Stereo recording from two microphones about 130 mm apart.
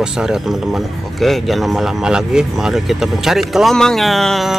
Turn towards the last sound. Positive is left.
turn(degrees=0)  # may be behind; listen again after turning